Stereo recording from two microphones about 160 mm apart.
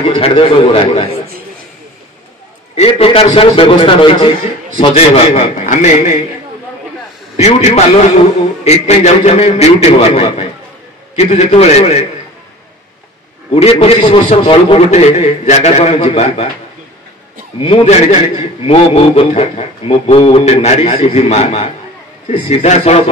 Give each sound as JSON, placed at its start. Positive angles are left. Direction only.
{"t": 0.0, "sound": "a man's voice", "side_deg": 35}
{"t": 2.7, "sound": "a man's voice", "side_deg": 35}
{"t": 5.6, "sound": "a man's voice", "side_deg": 50}
{"t": 7.3, "sound": "a man's voice", "side_deg": 45}
{"t": 13.5, "sound": "a man's voice", "side_deg": 40}
{"t": 17.6, "sound": "a man's voice", "side_deg": 40}